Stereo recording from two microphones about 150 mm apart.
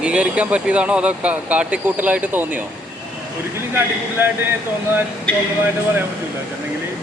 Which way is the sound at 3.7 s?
15° right (ahead or behind).